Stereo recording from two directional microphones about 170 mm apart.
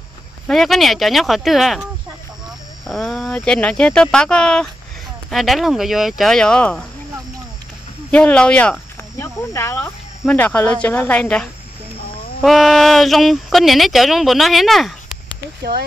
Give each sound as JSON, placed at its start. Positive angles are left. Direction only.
{"t": 0.5, "sound": "speech", "side_deg": 0}
{"t": 2.9, "sound": "speech", "side_deg": 0}
{"t": 8.1, "sound": "speech", "side_deg": 5}